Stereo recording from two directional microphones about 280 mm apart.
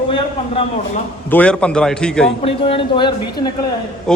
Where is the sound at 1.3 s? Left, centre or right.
Centre.